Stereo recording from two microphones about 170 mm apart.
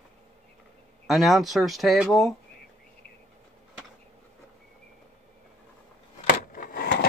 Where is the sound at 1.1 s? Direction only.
Centre (ahead or behind).